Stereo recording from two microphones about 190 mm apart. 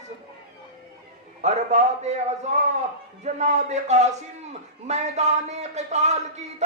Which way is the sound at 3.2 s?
40° right (ahead or behind).